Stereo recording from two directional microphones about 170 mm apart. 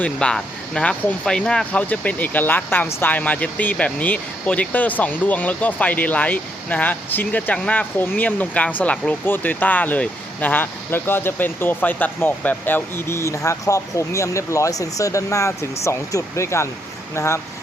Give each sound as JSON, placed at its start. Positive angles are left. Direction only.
{"t": 0.0, "sound": "speech", "side_deg": 5}